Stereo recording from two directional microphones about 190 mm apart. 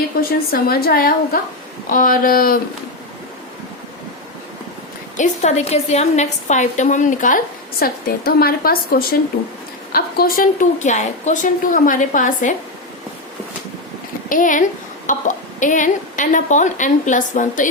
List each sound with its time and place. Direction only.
0.2 s a woman's voice: 55° left (ahead or behind)
5.1 s a woman's voice: 40° left (ahead or behind)
14.3 s a woman's voice: 45° left (ahead or behind)